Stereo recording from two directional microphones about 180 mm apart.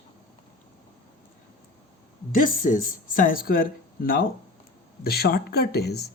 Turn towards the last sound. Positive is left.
turn(degrees=60)  # may be behind; listen again after turning